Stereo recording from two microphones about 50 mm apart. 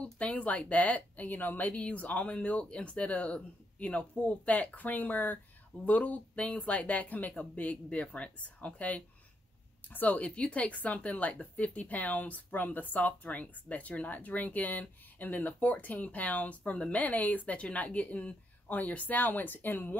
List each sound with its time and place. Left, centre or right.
0.0 s speech: left
10.2 s speech: left